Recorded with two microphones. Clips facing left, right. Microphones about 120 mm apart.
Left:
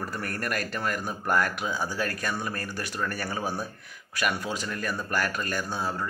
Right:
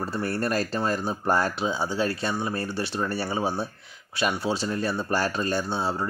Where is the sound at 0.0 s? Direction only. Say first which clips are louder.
Right 5 dB; 30° right (ahead or behind).